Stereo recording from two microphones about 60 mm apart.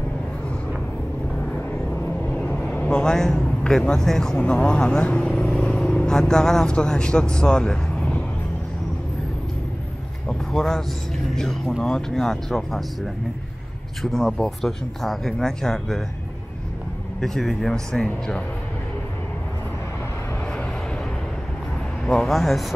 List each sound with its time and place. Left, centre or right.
1.4 s vehicle: left
3.4 s speech: centre
4.4 s a man's voice: centre
10.2 s vehicle: centre
11.3 s speech: centre
17.2 s speech: centre
22.0 s speech: centre
22.3 s speech: centre